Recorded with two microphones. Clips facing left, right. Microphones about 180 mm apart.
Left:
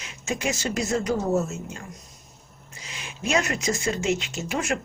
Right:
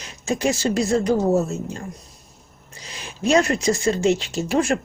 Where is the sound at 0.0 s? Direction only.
35° right (ahead or behind).